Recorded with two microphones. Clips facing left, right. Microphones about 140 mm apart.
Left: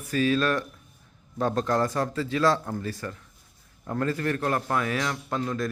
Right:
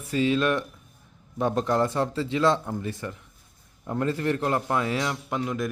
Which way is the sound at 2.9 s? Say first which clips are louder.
Right 1 dB; 20° right (ahead or behind).